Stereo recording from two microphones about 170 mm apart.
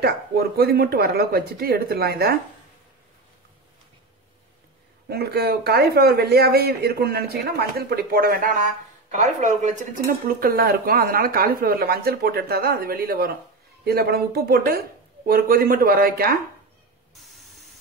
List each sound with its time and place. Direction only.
0.0 s speech: 65° right (ahead or behind)
5.1 s speech: 70° right (ahead or behind)
9.1 s speech: 45° right (ahead or behind); by 16.3 s 60° right (ahead or behind)